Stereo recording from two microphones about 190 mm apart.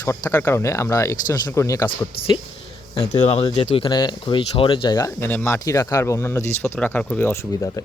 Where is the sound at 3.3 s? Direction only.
30° left (ahead or behind).